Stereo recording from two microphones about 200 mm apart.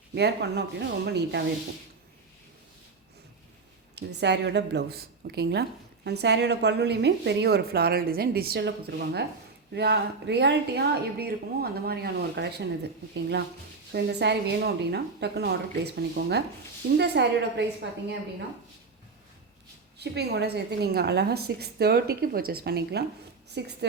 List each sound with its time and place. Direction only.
0.1 s speech: 55° right (ahead or behind)
3.9 s speech: 60° right (ahead or behind)
20.0 s a woman's voice: 55° right (ahead or behind)